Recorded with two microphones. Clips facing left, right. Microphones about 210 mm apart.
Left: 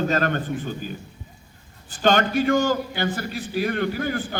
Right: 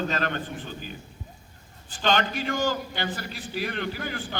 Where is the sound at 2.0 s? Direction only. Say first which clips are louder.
Left 6 dB; 45° left (ahead or behind).